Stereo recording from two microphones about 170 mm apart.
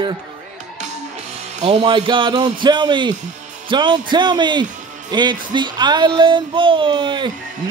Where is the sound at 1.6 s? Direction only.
35° right (ahead or behind).